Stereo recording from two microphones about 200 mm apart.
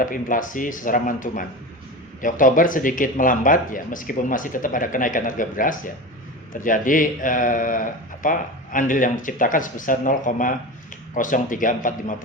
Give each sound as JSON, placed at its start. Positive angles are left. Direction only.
{"t": 0.0, "sound": "a man's voice", "side_deg": 40}